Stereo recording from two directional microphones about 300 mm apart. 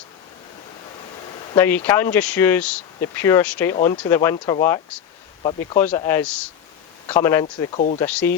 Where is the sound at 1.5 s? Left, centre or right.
Centre.